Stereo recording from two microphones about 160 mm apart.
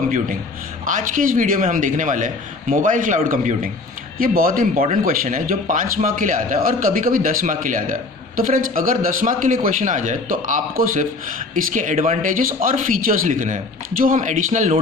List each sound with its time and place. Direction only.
0.9 s speech: 55° right (ahead or behind)